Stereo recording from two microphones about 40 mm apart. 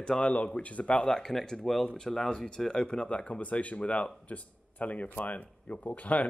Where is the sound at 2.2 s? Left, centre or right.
Centre.